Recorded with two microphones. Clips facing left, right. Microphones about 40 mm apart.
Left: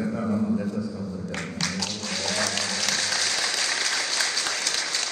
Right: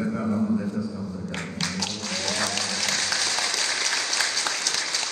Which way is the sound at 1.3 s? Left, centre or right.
Right.